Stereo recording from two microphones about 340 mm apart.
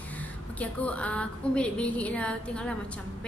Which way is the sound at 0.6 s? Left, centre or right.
Centre.